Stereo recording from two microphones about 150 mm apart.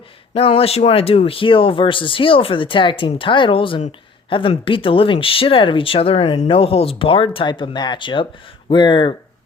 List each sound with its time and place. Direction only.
0.3 s speech: 40° left (ahead or behind)